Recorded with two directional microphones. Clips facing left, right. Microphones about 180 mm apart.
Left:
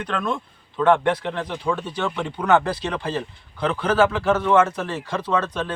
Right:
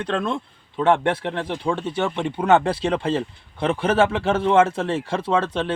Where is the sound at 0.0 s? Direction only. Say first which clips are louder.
Right 2 dB; 25° right (ahead or behind).